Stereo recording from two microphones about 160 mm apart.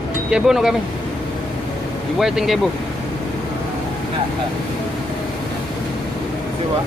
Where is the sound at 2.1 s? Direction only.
Centre (ahead or behind).